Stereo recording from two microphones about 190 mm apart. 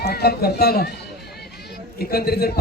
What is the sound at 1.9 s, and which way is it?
Speech, 55° left (ahead or behind).